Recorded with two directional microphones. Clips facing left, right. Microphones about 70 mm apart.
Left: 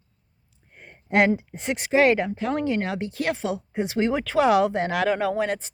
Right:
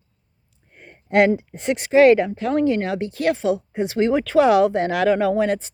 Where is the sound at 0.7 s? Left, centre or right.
Centre.